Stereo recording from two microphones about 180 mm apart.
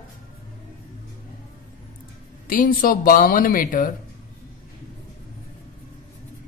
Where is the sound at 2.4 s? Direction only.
50° left (ahead or behind).